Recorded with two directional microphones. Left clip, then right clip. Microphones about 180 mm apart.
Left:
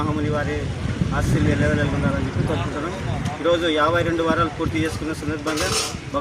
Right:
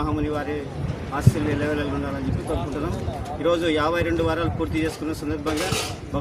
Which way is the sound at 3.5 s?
25° right (ahead or behind).